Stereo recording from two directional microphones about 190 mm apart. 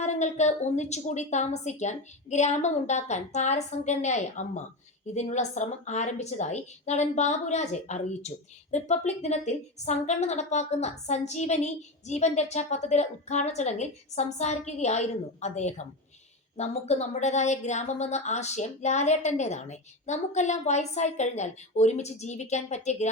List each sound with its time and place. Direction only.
0.0 s a woman's voice: 40° left (ahead or behind)